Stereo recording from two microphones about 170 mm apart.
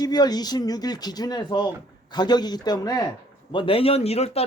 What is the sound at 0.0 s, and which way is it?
Speech, 25° left (ahead or behind).